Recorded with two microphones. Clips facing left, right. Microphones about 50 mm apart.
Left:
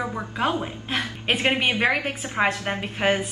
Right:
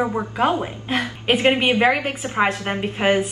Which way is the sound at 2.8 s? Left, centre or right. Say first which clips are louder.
Right 5 dB; centre.